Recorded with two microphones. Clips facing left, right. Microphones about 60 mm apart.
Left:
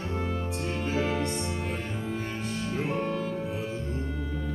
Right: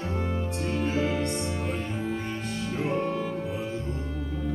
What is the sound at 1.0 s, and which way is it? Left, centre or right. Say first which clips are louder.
Music: left 1 dB; centre.